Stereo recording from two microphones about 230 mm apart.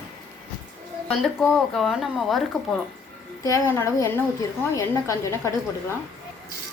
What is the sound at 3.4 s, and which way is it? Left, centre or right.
Speech, centre.